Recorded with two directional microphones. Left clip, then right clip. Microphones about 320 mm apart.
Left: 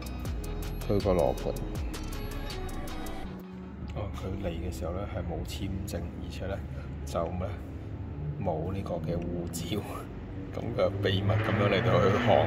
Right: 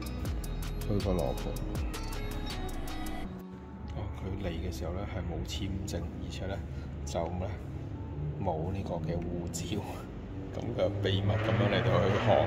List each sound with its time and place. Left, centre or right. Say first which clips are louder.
0.9 s a man's voice: left 7 dB; centre
4.4 s a man's voice: left 2 dB; centre
7.1 s a man's voice: left 2 dB; centre